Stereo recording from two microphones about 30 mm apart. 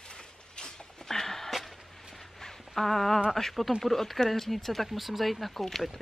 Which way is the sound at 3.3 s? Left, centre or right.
Centre.